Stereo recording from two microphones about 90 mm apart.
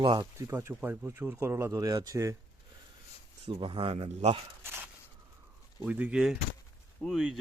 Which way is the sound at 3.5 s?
85° right.